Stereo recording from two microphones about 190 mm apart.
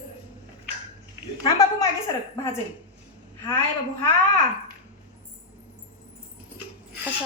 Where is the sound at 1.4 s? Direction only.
20° left (ahead or behind).